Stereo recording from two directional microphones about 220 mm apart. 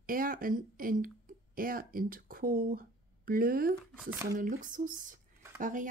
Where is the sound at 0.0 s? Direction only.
40° right (ahead or behind).